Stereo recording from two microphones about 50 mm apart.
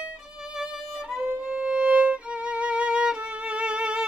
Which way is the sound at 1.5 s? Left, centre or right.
Centre.